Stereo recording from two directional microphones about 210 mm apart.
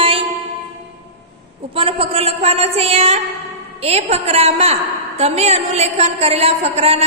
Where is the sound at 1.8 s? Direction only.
25° right (ahead or behind).